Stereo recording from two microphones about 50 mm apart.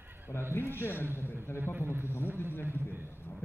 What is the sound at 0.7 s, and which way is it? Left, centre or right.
Speech, left.